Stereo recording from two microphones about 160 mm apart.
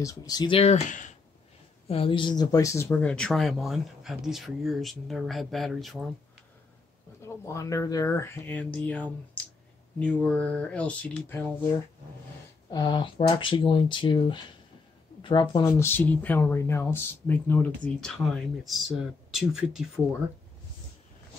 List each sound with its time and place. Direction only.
0.0 s speech: 20° left (ahead or behind)
0.6 s speech: 45° left (ahead or behind)
1.9 s speech: 35° left (ahead or behind); by 6.0 s centre (ahead or behind)
7.2 s speech: 20° left (ahead or behind)
12.6 s speech: 25° left (ahead or behind)
15.6 s speech: 15° left (ahead or behind); by 19.8 s 5° right (ahead or behind)